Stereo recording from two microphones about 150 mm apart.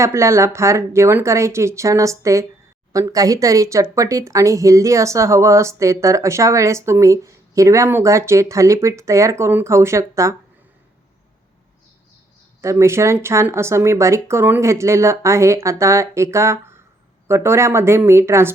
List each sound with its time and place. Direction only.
0.0 s speech: 20° right (ahead or behind)
12.6 s speech: 15° right (ahead or behind)